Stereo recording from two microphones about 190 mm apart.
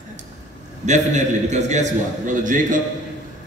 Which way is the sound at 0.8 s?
40° right (ahead or behind).